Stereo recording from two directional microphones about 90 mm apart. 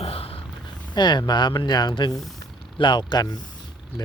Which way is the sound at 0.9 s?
55° left (ahead or behind).